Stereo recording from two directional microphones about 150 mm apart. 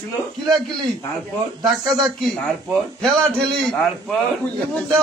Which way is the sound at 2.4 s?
5° left (ahead or behind).